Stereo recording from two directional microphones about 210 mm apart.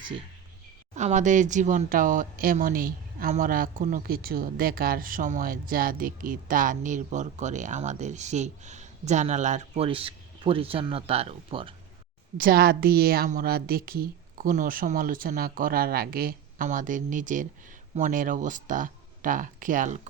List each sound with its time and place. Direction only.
0.9 s speech: 35° right (ahead or behind)
12.4 s a woman's voice: 45° right (ahead or behind)